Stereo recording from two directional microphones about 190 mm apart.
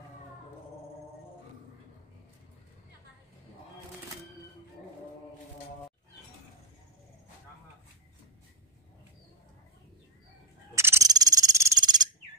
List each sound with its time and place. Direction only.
10.7 s owl: 15° right (ahead or behind)